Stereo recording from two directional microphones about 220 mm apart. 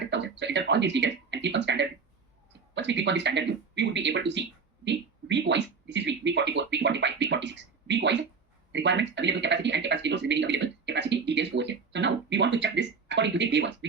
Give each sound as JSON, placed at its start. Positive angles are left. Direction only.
{"t": 0.1, "sound": "speech", "side_deg": -55}